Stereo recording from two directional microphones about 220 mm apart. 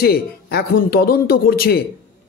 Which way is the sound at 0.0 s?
45° left (ahead or behind).